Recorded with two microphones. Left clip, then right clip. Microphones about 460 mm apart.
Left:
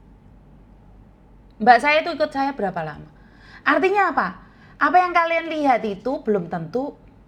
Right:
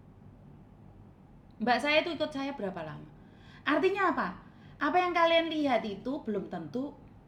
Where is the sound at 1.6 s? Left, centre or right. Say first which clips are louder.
Left 12 dB; left.